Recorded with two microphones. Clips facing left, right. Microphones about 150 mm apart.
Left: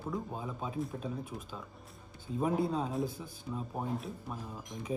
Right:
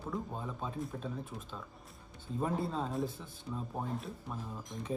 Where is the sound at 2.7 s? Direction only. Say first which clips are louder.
Left 2 dB; centre (ahead or behind).